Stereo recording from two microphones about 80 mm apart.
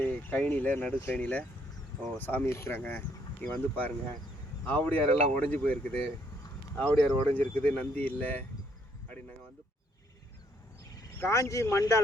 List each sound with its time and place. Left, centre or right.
0.0 s speech: left
11.2 s speech: left